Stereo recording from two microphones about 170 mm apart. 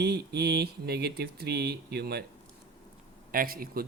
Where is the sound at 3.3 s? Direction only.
60° right (ahead or behind).